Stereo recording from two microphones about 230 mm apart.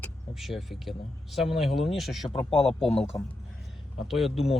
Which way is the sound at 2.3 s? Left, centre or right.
Left.